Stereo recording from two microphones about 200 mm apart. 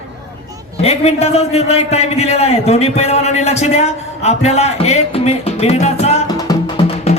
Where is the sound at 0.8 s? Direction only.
30° left (ahead or behind).